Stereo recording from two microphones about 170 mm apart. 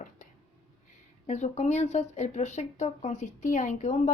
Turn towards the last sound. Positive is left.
turn(degrees=45)  # may be behind; listen again after turning